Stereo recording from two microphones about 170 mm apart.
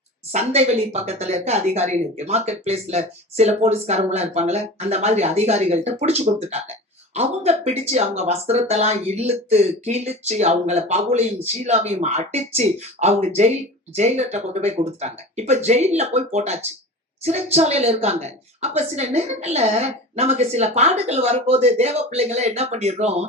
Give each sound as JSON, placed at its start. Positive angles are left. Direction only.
{"t": 0.3, "sound": "speech", "side_deg": -40}